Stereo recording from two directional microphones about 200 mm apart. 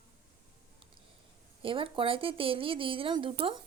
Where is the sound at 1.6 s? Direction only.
25° right (ahead or behind).